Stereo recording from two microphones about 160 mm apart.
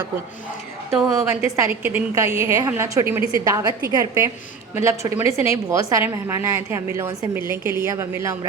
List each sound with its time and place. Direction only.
1.0 s a woman's voice: 15° right (ahead or behind)